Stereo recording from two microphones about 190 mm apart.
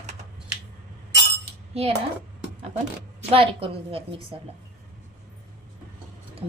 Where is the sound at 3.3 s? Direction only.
30° right (ahead or behind).